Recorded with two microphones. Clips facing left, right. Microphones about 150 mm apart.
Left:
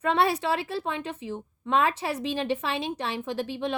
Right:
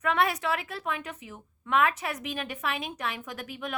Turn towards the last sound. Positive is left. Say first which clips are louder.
# left 8 dB
turn(degrees=30)  # may be behind; listen again after turning